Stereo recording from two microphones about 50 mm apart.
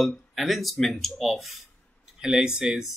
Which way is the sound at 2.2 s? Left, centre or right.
Centre.